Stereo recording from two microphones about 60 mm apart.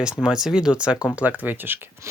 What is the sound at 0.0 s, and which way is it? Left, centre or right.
Speech, centre.